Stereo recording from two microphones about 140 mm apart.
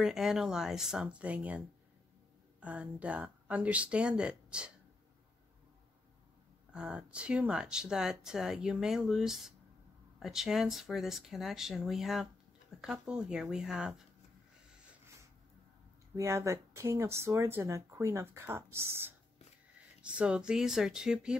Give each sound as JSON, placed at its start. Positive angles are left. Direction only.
{"t": 0.0, "sound": "speech", "side_deg": -5}
{"t": 2.6, "sound": "speech", "side_deg": -10}
{"t": 6.7, "sound": "speech", "side_deg": -5}
{"t": 16.2, "sound": "speech", "side_deg": -20}
{"t": 20.0, "sound": "speech", "side_deg": -5}